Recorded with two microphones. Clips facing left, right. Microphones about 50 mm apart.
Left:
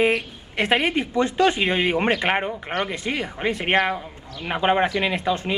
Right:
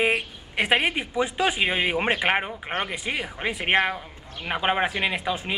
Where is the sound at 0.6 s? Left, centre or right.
Centre.